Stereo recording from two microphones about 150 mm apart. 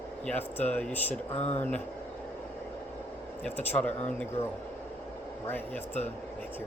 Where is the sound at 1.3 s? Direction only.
45° left (ahead or behind).